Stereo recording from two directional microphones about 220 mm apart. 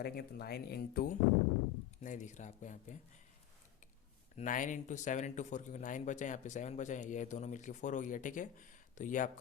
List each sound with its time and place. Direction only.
0.0 s speech: 45° left (ahead or behind)
2.0 s speech: 35° left (ahead or behind)
4.4 s speech: 35° left (ahead or behind)